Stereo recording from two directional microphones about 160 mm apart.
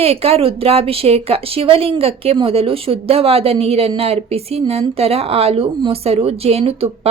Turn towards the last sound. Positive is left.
turn(degrees=-40)  # may be behind; listen again after turning